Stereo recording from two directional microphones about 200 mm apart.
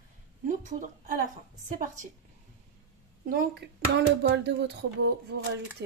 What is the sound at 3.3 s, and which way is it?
Speech, 50° right (ahead or behind).